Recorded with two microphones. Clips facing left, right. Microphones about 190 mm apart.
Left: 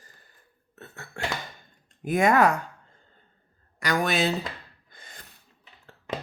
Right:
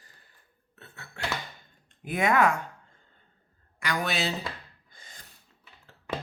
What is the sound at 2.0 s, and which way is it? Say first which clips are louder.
Speech: left 4 dB; 45° left (ahead or behind).